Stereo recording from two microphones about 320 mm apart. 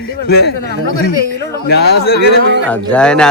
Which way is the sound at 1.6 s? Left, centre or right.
Left.